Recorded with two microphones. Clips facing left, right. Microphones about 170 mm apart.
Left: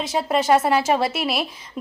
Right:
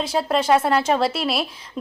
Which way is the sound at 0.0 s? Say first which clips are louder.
Even; centre (ahead or behind).